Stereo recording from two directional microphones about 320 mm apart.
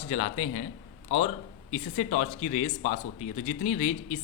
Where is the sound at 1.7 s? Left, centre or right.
Centre.